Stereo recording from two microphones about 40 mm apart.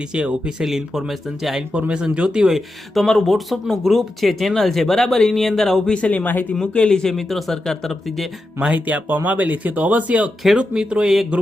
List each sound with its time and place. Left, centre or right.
0.1 s speech: right
0.6 s speech: centre
1.7 s speech: right
2.5 s speech: centre
6.1 s speech: left
6.9 s speech: centre
8.7 s speech: right
10.6 s speech: right
11.0 s speech: centre